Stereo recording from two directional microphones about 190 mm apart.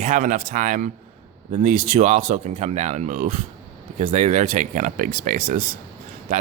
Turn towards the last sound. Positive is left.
turn(degrees=-50)  # may be behind; listen again after turning